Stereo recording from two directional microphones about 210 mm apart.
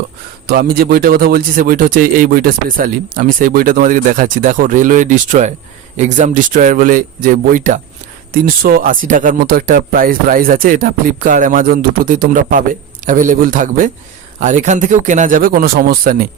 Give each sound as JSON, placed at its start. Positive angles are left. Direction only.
{"t": 0.4, "sound": "a man's voice", "side_deg": -45}